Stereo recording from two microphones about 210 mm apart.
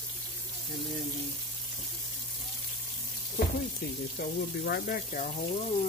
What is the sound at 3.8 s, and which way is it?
Speech, 50° left (ahead or behind).